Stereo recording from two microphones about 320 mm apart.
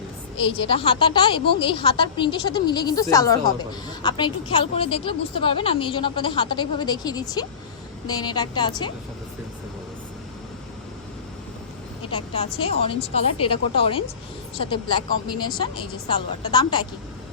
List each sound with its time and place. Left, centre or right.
0.7 s a woman's voice: centre
12.1 s a woman's voice: centre